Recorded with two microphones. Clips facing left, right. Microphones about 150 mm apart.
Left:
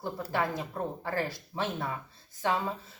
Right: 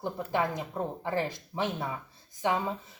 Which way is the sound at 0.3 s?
15° right (ahead or behind).